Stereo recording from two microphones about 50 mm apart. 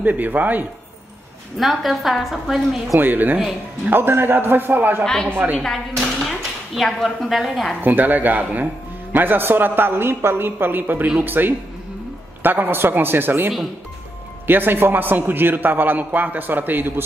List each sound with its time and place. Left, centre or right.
0.0 s a man's voice: right
1.6 s a woman's voice: centre
3.0 s a man's voice: right
5.0 s a woman's voice: centre
5.9 s speech: centre
7.8 s a man's voice: right
14.5 s a man's voice: right